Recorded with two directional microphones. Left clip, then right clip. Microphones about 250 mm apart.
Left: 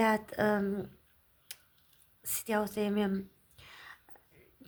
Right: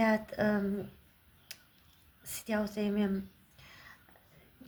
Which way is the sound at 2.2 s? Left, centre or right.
Left.